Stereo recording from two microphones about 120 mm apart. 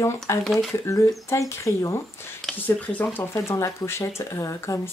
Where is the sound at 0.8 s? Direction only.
25° left (ahead or behind).